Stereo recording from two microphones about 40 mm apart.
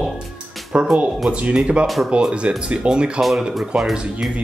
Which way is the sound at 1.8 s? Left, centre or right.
Centre.